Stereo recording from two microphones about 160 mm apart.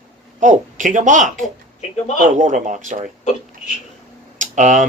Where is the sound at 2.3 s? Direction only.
50° right (ahead or behind).